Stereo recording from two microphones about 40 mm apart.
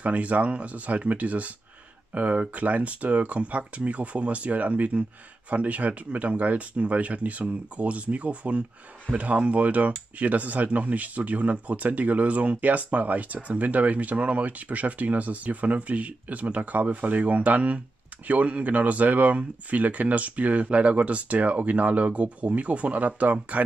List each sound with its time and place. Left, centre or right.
0.0 s speech: right